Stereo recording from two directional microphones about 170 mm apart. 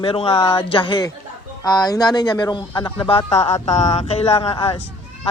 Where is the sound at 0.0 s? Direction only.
30° left (ahead or behind).